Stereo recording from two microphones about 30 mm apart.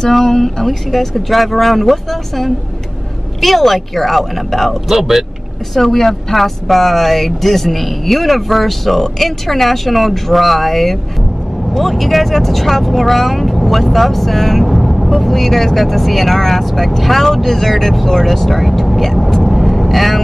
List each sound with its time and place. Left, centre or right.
0.1 s speech: centre
0.7 s speech: centre
4.9 s speech: centre
5.8 s speech: centre
19.3 s vehicle: centre